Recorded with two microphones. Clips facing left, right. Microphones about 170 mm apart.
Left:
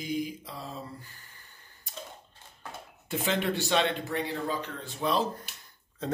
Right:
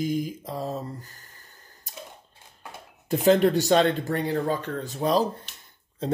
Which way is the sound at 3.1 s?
40° right (ahead or behind).